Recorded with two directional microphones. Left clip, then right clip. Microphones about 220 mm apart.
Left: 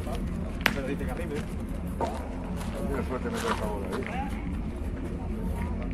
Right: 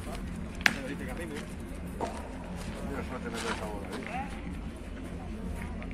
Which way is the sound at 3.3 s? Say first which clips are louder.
Left 4 dB; 35° left (ahead or behind).